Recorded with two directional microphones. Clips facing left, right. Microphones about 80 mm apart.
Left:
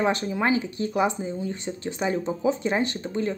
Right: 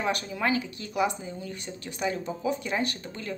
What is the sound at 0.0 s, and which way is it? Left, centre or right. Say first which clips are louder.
Speech: left 5 dB; left.